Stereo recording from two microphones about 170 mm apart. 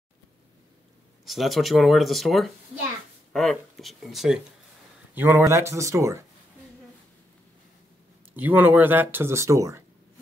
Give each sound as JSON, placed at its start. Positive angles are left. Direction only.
{"t": 1.2, "sound": "speech", "side_deg": 0}
{"t": 5.1, "sound": "speech", "side_deg": -10}
{"t": 8.4, "sound": "speech", "side_deg": -10}